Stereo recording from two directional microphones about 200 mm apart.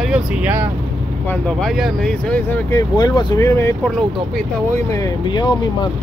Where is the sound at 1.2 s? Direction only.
5° left (ahead or behind).